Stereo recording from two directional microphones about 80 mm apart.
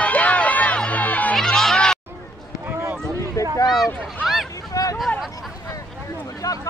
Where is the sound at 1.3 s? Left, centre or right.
Centre.